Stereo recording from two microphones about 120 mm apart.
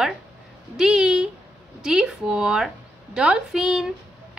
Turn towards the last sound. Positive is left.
turn(degrees=-5)  # may be behind; listen again after turning